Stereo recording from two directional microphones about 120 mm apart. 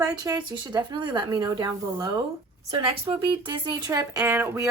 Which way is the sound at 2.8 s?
45° right (ahead or behind).